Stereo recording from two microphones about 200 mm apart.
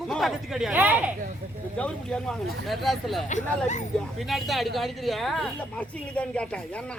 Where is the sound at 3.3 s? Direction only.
35° left (ahead or behind).